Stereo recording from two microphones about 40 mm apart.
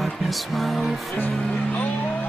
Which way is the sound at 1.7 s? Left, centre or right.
Left.